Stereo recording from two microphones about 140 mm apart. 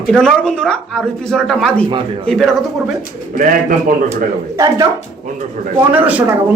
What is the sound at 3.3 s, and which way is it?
Speech, 75° right (ahead or behind).